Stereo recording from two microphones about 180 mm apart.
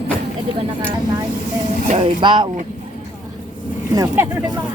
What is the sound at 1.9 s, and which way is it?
Speech, 30° right (ahead or behind).